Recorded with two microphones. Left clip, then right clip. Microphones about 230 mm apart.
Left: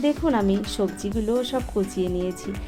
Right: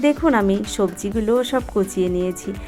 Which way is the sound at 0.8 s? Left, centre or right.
Right.